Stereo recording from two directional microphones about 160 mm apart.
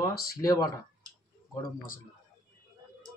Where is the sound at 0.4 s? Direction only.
20° left (ahead or behind).